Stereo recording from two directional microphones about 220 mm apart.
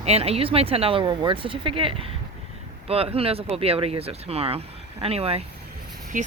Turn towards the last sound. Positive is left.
turn(degrees=-35)  # may be behind; listen again after turning